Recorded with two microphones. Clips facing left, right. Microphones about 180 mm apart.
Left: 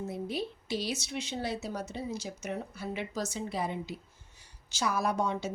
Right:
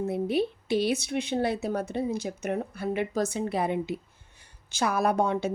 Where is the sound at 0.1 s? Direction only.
60° right (ahead or behind).